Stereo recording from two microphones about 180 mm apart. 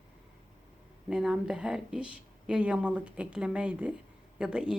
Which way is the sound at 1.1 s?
5° right (ahead or behind).